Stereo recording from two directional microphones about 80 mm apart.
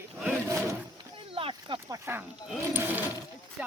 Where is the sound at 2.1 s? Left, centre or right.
Right.